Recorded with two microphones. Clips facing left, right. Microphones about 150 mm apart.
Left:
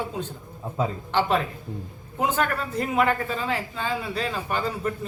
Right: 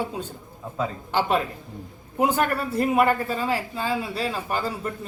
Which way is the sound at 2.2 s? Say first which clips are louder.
Right 2 dB; 10° right (ahead or behind).